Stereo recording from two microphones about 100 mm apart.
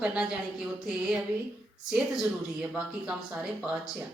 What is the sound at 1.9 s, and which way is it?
A woman's voice, 5° right (ahead or behind).